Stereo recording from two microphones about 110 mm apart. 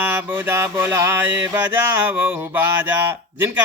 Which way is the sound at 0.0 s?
20° right (ahead or behind).